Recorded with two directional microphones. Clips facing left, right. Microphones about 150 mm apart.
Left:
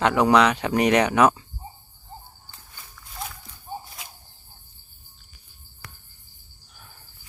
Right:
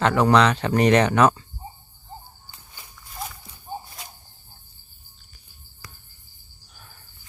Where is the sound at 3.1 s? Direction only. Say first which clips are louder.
Right 1 dB; centre (ahead or behind).